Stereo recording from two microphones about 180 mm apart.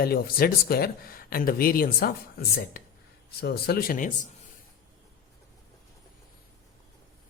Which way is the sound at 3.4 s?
60° left (ahead or behind).